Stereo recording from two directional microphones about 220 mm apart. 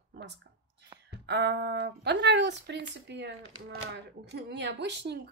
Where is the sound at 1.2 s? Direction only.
50° right (ahead or behind).